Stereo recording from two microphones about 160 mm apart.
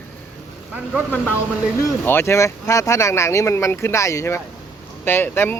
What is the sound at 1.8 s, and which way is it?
Speech, 15° left (ahead or behind).